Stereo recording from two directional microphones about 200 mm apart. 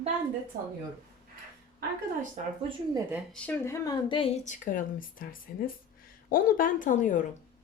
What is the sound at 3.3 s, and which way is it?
A woman's voice, 10° left (ahead or behind).